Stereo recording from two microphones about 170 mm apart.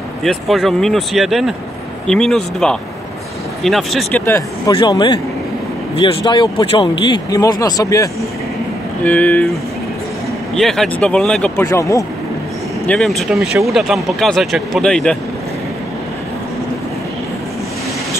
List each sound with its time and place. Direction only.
0.2 s speech: centre (ahead or behind)
4.7 s speech: 25° left (ahead or behind)
9.0 s speech: 10° left (ahead or behind)
11.6 s speech: 20° left (ahead or behind)
12.8 s speech: 5° left (ahead or behind)